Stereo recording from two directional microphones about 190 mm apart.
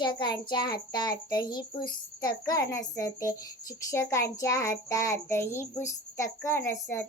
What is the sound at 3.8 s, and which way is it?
Child singing, 15° left (ahead or behind).